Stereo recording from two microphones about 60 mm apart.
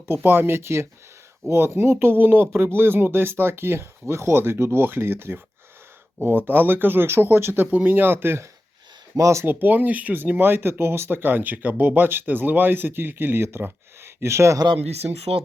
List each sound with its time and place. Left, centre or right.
0.1 s speech: right
7.7 s speech: right
9.1 s speech: right
9.4 s speech: right